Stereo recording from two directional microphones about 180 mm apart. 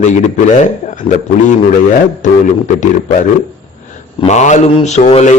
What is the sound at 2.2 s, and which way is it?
Speech, 45° left (ahead or behind).